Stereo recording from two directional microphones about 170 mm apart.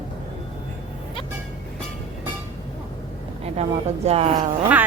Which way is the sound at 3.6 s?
40° right (ahead or behind).